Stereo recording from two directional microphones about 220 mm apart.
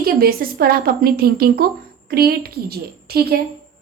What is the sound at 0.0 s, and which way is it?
A woman's voice, 45° right (ahead or behind).